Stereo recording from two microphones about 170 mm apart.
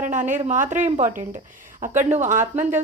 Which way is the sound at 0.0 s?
50° right (ahead or behind).